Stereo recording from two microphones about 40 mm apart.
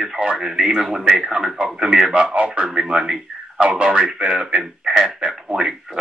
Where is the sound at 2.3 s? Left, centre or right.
Right.